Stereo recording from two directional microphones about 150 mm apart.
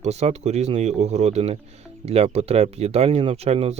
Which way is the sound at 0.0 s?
50° right (ahead or behind).